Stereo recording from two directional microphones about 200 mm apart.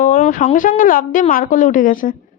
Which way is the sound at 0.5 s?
40° left (ahead or behind).